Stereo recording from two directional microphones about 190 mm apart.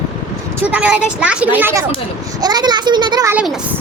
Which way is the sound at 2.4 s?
20° right (ahead or behind).